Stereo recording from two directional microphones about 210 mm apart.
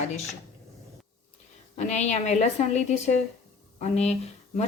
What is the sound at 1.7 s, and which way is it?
Speech, 35° left (ahead or behind).